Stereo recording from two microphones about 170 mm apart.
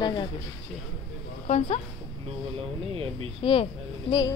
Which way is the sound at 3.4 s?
30° left (ahead or behind).